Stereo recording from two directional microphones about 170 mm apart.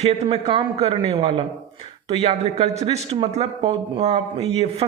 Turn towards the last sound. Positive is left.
turn(degrees=-40)  # may be behind; listen again after turning